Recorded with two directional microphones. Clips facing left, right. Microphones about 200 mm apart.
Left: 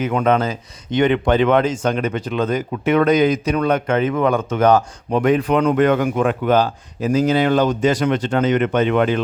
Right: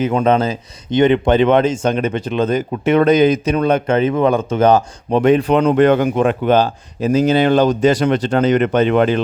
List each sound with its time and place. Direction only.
0.0 s speech: 30° right (ahead or behind)